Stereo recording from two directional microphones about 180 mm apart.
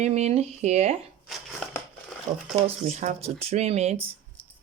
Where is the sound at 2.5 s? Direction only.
40° right (ahead or behind).